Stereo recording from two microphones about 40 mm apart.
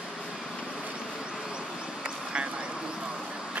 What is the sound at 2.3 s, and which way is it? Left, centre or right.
Vehicle, right.